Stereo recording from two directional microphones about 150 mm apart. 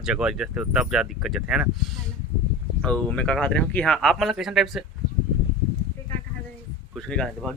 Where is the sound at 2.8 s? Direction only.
10° left (ahead or behind).